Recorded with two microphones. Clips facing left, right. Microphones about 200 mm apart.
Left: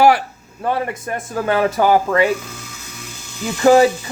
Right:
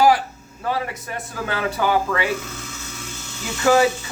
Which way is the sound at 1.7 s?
45° left (ahead or behind).